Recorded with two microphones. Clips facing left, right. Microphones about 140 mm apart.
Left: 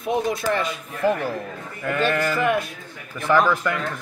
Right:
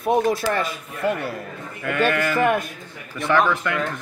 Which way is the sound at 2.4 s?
50° right (ahead or behind).